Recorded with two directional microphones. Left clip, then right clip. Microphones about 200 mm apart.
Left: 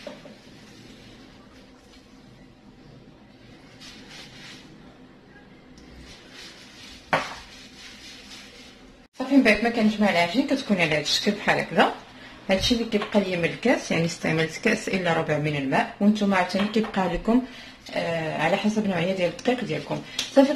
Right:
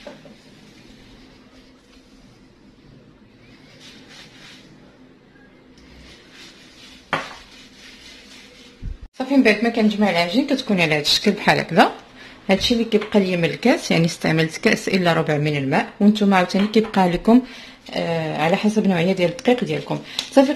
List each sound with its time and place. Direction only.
9.4 s speech: 60° right (ahead or behind)